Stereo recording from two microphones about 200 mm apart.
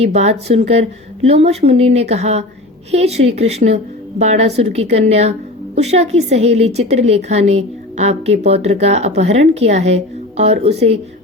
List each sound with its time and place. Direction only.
0.0 s a woman's voice: 35° right (ahead or behind)